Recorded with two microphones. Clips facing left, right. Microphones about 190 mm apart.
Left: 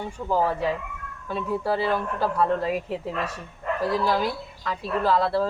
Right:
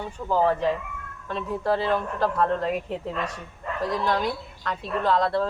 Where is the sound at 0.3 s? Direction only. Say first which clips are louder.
Right 2 dB; 10° left (ahead or behind).